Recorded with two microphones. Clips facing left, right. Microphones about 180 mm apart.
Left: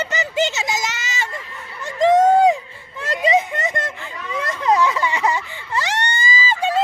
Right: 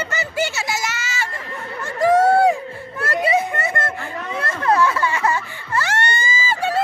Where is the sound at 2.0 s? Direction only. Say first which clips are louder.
Left 1 dB; 20° left (ahead or behind).